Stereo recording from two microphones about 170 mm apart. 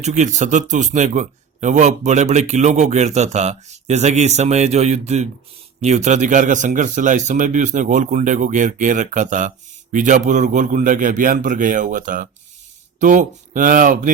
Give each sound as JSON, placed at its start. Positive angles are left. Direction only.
{"t": 0.0, "sound": "a man's voice", "side_deg": -45}